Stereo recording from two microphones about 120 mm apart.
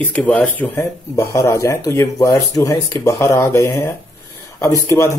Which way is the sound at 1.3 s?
25° left (ahead or behind).